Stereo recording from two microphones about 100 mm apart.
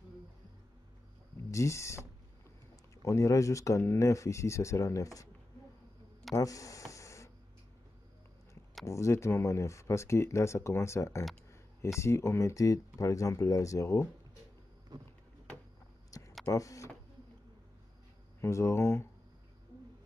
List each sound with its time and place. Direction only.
1.5 s speech: 30° left (ahead or behind)
6.3 s a sound: 35° left (ahead or behind)
8.8 s speech: 30° left (ahead or behind)
14.9 s vehicle: 45° right (ahead or behind)
16.1 s a sound: 30° left (ahead or behind)
16.5 s speech: 35° left (ahead or behind)
18.4 s speech: 30° left (ahead or behind)